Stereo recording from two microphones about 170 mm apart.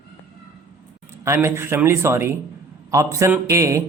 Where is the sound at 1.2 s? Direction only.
15° right (ahead or behind).